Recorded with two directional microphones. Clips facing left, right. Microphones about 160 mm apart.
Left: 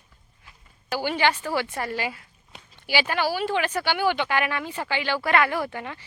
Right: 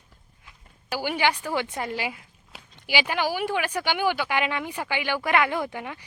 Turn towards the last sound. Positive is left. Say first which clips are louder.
# even
turn(degrees=-15)  # may be behind; listen again after turning